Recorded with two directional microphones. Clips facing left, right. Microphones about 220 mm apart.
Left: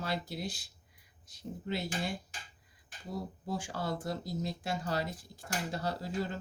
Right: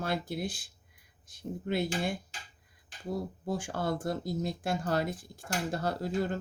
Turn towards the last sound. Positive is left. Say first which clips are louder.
# right 4 dB
turn(degrees=-50)  # may be behind; listen again after turning